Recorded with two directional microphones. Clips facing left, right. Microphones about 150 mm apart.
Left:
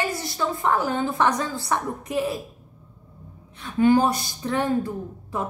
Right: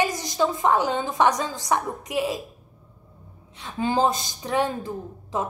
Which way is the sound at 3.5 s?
20° right (ahead or behind).